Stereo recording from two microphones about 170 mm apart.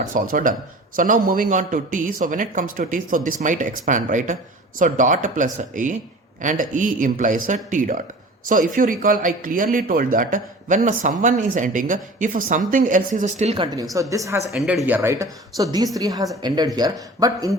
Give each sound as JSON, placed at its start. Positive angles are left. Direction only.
{"t": 0.0, "sound": "a man's voice", "side_deg": -50}
{"t": 13.9, "sound": "speech", "side_deg": -20}
{"t": 14.5, "sound": "speech", "side_deg": 0}